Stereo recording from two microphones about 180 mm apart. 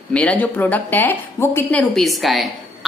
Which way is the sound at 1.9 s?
Centre (ahead or behind).